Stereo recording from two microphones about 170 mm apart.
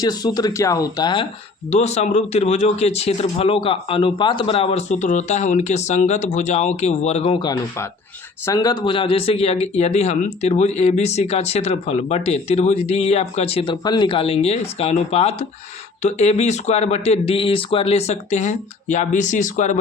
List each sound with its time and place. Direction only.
0.0 s speech: 25° left (ahead or behind)
1.7 s speech: 40° left (ahead or behind)
7.4 s speech: 20° left (ahead or behind); by 19.8 s 45° left (ahead or behind)